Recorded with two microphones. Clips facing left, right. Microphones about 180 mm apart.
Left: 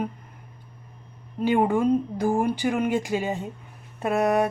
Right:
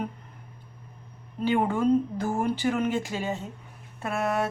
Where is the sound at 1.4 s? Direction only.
15° left (ahead or behind).